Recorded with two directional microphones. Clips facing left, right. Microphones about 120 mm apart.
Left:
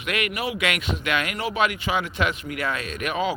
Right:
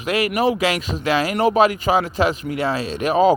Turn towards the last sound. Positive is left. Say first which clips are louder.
# right 9 dB
turn(degrees=-35)  # may be behind; listen again after turning